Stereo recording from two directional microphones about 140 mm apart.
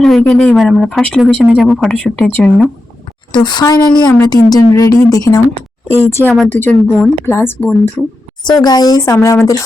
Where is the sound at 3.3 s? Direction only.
30° left (ahead or behind); by 7.7 s 15° left (ahead or behind).